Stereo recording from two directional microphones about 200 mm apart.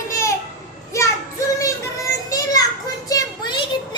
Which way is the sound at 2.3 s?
15° left (ahead or behind).